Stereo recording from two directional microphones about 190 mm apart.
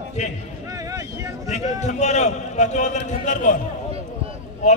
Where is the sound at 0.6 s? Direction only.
15° right (ahead or behind).